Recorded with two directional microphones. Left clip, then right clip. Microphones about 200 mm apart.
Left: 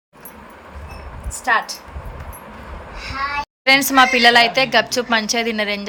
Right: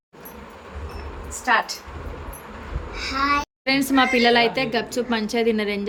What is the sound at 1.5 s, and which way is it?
Speech, 40° left (ahead or behind).